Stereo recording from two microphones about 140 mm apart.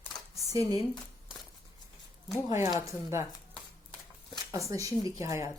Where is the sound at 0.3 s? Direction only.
25° right (ahead or behind).